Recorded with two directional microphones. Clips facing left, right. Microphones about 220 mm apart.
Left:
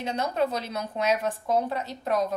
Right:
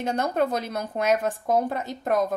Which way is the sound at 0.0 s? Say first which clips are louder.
Right 2 dB; 50° right (ahead or behind).